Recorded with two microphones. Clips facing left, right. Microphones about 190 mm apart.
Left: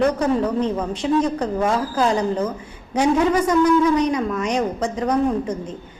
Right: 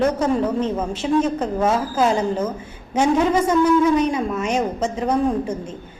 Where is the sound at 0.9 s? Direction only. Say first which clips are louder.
Right 1 dB; 25° right (ahead or behind).